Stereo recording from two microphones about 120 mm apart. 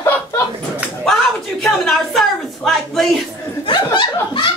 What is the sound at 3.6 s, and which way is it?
Speech, 40° left (ahead or behind).